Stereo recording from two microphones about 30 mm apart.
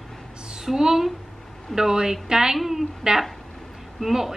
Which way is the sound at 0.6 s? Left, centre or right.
Centre.